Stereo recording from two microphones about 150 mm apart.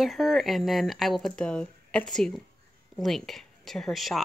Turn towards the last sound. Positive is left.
turn(degrees=0)  # may be behind; listen again after turning